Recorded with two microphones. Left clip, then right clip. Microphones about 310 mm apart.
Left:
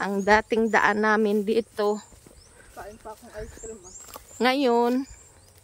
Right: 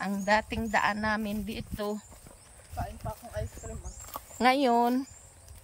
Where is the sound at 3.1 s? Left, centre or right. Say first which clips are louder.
Even; centre.